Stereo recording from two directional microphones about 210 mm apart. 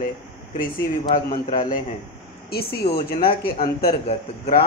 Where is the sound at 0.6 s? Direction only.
40° left (ahead or behind).